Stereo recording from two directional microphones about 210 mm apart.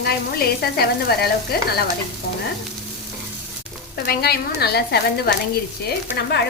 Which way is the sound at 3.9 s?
50° left (ahead or behind).